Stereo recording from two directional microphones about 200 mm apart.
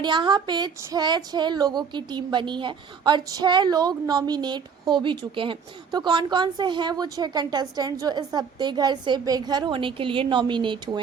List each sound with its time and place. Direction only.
0.0 s speech: 20° right (ahead or behind)